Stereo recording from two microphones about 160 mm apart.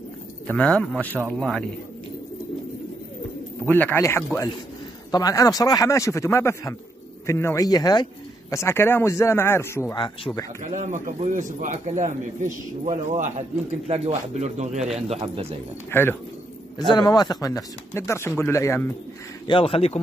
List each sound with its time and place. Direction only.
0.5 s a man's voice: 5° left (ahead or behind)
3.6 s speech: 10° left (ahead or behind)
9.9 s speech: 30° left (ahead or behind)
10.6 s a man's voice: 50° right (ahead or behind)
15.9 s speech: 15° left (ahead or behind)
16.9 s speech: 25° left (ahead or behind)
19.4 s speech: 35° left (ahead or behind)